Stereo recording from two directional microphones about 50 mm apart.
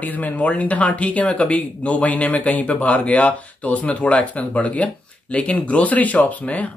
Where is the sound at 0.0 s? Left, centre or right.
Left.